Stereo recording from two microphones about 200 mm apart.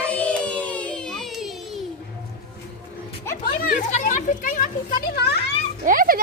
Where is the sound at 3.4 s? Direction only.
45° left (ahead or behind).